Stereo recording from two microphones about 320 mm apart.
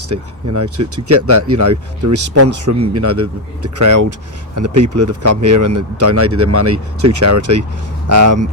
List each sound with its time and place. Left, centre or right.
0.1 s speech: right
5.4 s speech: right